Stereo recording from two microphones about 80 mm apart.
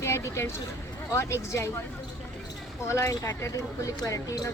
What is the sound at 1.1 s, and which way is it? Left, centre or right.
Speech, left.